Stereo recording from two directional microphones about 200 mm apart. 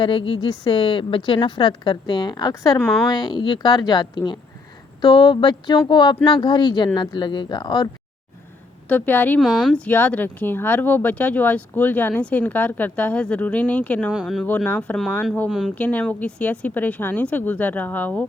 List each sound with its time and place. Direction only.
0.0 s a woman's voice: 25° left (ahead or behind)
8.9 s speech: 10° left (ahead or behind)
9.4 s speech: centre (ahead or behind)
14.4 s speech: 10° left (ahead or behind)